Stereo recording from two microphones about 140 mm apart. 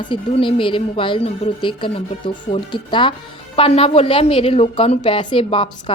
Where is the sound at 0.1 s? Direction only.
40° left (ahead or behind).